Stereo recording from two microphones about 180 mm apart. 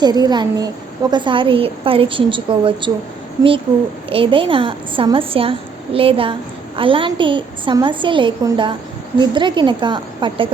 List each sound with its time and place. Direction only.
0.0 s a woman's voice: 25° right (ahead or behind)
4.1 s a woman's voice: 30° right (ahead or behind)